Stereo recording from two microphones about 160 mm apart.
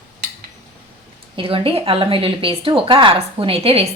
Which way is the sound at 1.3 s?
35° right (ahead or behind).